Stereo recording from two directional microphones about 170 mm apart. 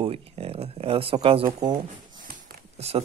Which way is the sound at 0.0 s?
35° right (ahead or behind).